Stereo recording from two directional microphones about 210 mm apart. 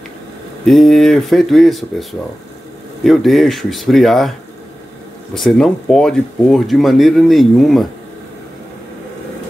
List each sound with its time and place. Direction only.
0.7 s speech: centre (ahead or behind)
5.3 s speech: centre (ahead or behind)